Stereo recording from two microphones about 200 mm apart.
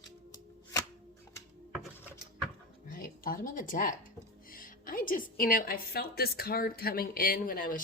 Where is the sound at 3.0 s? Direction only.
45° left (ahead or behind).